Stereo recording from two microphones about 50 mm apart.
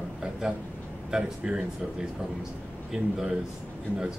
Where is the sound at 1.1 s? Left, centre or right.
Centre.